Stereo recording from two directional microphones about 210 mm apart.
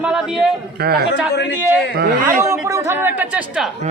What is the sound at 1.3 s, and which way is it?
Speech, 50° left (ahead or behind).